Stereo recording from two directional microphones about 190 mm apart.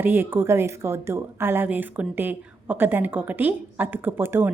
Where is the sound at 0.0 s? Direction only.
10° right (ahead or behind).